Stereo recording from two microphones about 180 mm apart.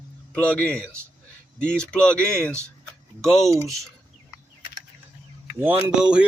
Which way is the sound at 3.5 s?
15° right (ahead or behind).